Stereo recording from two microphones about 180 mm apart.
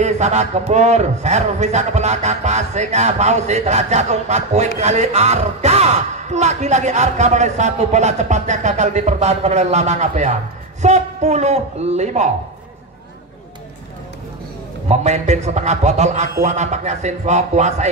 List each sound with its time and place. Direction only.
0.0 s a man's voice: 40° right (ahead or behind)
14.9 s a man's voice: 40° right (ahead or behind)